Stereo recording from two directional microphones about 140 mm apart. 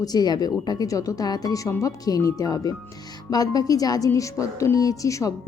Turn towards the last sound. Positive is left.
turn(degrees=25)  # may be behind; listen again after turning